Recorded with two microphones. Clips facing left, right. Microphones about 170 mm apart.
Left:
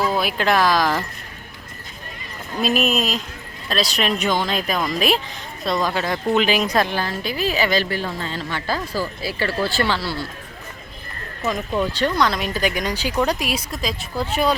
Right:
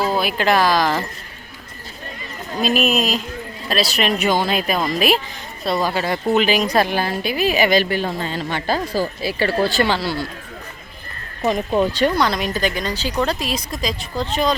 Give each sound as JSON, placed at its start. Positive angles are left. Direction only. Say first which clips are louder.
{"t": 0.1, "sound": "speech", "louder": "right 2 dB", "side_deg": 0}
{"t": 2.6, "sound": "a woman's voice", "louder": "right 2 dB", "side_deg": 0}
{"t": 11.4, "sound": "speech", "louder": "right 4 dB", "side_deg": -30}
{"t": 11.9, "sound": "speech", "louder": "right 2 dB", "side_deg": -10}